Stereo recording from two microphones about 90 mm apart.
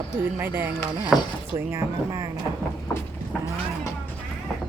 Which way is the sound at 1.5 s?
35° right (ahead or behind).